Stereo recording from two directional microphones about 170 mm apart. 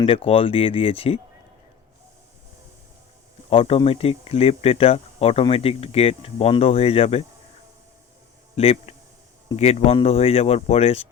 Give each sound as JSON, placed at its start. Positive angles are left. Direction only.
{"t": 0.0, "sound": "speech", "side_deg": 35}
{"t": 3.5, "sound": "speech", "side_deg": 35}
{"t": 8.5, "sound": "speech", "side_deg": 35}